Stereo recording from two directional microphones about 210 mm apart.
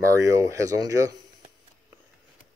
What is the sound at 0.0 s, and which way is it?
Speech, 15° right (ahead or behind).